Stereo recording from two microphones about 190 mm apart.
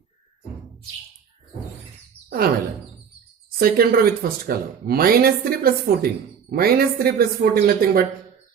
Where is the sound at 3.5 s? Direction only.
50° right (ahead or behind).